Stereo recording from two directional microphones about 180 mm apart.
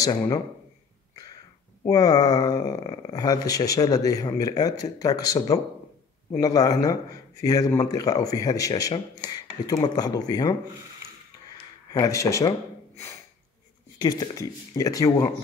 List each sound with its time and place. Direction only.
0.0 s speech: 20° left (ahead or behind)
1.1 s throat clearing: 20° left (ahead or behind)
1.9 s speech: 20° left (ahead or behind)
11.9 s speech: 15° left (ahead or behind)
13.9 s speech: 20° left (ahead or behind)